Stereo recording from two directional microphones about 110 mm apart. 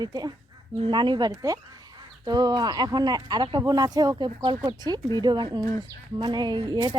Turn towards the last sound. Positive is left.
turn(degrees=-40)  # may be behind; listen again after turning